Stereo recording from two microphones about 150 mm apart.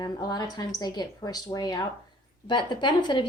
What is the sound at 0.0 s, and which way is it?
A woman's voice, 25° left (ahead or behind).